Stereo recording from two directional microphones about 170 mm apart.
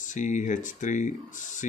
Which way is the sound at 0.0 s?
45° left (ahead or behind).